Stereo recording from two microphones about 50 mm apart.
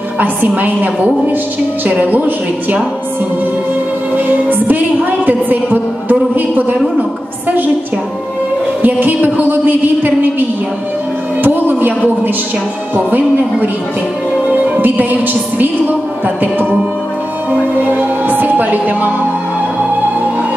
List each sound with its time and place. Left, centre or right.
0.2 s music: right
4.1 s music: right
5.2 s a sound: right
8.8 s music: right
11.4 s a sound: right
12.9 s music: right
17.5 s music: right